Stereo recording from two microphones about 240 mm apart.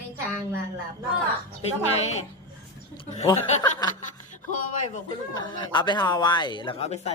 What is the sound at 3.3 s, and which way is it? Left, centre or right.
Speech, centre.